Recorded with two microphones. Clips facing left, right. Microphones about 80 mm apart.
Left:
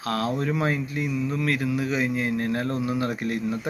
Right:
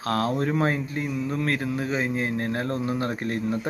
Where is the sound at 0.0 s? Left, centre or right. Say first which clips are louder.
Right 1 dB; right.